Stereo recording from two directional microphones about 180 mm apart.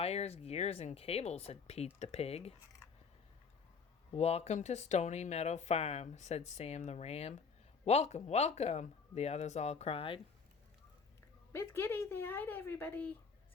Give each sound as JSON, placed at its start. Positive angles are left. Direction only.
{"t": 0.0, "sound": "speech", "side_deg": 35}
{"t": 4.1, "sound": "speech", "side_deg": 35}
{"t": 11.5, "sound": "speech", "side_deg": 15}